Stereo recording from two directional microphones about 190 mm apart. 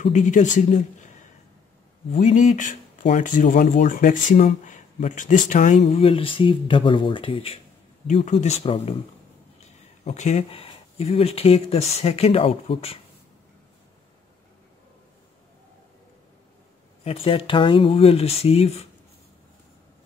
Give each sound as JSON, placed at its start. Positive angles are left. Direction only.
{"t": 0.0, "sound": "speech", "side_deg": 40}
{"t": 17.0, "sound": "speech", "side_deg": 30}